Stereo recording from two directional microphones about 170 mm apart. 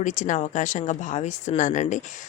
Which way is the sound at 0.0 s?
45° left (ahead or behind).